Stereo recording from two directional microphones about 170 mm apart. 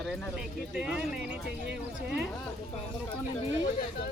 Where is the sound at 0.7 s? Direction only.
5° right (ahead or behind).